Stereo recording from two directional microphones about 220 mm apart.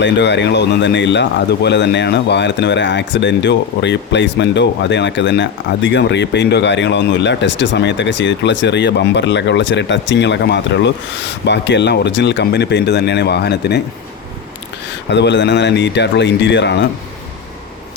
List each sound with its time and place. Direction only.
0.0 s speech: 50° left (ahead or behind)
15.1 s speech: 55° left (ahead or behind)